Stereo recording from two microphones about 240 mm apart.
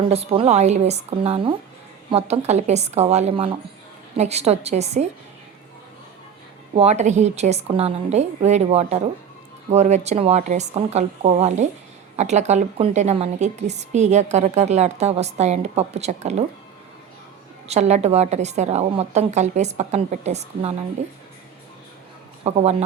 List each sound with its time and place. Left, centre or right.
0.1 s a woman's voice: right
6.7 s a woman's voice: right
17.7 s a woman's voice: right
22.4 s a woman's voice: right